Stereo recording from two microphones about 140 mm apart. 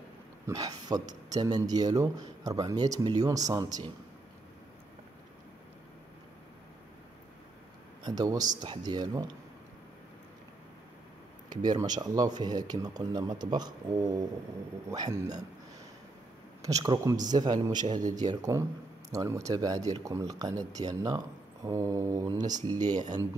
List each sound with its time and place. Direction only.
0.5 s speech: 25° right (ahead or behind)
8.0 s speech: 25° right (ahead or behind)
11.4 s speech: 30° right (ahead or behind)
16.6 s speech: 25° right (ahead or behind)